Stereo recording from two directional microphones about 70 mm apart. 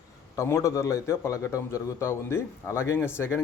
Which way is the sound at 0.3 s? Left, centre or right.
Left.